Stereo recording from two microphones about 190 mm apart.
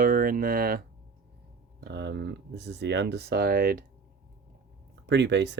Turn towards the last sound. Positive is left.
turn(degrees=-65)  # may be behind; listen again after turning